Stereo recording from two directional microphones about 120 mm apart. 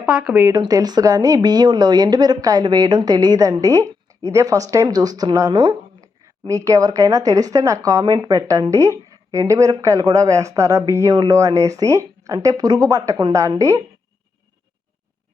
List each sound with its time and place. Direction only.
0.0 s speech: 5° right (ahead or behind)
0.5 s speech: 35° right (ahead or behind)